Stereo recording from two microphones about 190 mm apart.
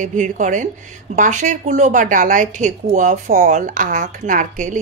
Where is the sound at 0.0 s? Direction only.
40° right (ahead or behind).